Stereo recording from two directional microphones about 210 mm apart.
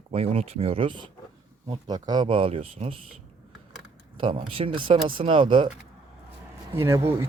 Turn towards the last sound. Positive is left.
turn(degrees=-10)  # may be behind; listen again after turning